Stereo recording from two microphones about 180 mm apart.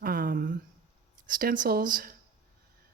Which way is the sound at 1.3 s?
50° right (ahead or behind).